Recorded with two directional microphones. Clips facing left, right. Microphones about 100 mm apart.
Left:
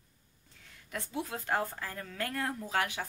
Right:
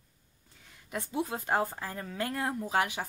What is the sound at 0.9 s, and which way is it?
Speech, 15° right (ahead or behind).